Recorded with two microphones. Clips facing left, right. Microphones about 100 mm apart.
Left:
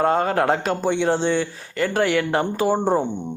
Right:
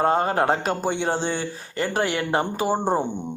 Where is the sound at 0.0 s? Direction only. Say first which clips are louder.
Left 1 dB; 30° right (ahead or behind).